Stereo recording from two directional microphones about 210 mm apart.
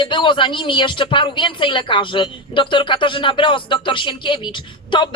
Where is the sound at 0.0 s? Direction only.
25° left (ahead or behind).